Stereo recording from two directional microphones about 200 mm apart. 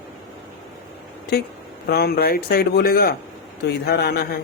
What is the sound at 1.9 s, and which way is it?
Speech, 50° left (ahead or behind).